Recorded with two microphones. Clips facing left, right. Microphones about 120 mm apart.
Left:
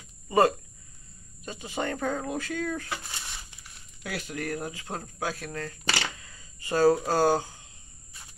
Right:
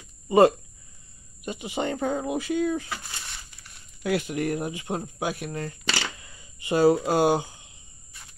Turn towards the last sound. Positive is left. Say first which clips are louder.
# right 2 dB
turn(degrees=-15)  # may be behind; listen again after turning